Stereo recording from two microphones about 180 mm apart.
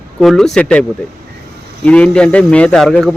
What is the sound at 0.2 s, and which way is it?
A man's voice, centre (ahead or behind).